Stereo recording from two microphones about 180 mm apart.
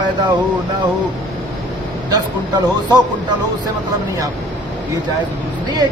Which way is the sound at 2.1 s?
20° right (ahead or behind).